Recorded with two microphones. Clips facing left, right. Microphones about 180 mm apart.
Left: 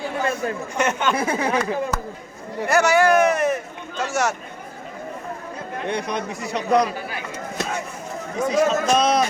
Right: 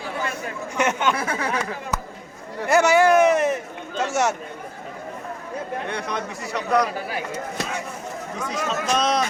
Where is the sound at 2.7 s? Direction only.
25° right (ahead or behind).